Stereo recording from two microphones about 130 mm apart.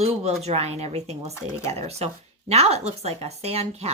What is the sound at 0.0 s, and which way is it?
Speech, 55° right (ahead or behind).